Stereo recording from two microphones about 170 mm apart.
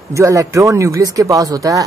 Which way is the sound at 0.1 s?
20° right (ahead or behind).